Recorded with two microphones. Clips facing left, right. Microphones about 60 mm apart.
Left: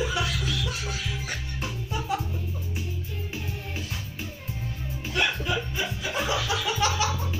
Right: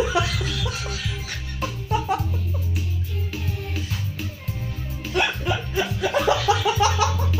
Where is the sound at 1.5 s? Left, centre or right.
Right.